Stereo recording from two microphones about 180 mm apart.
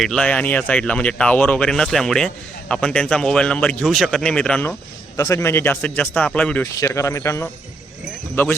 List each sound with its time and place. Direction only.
0.0 s speech: 5° left (ahead or behind)
5.1 s speech: 15° left (ahead or behind)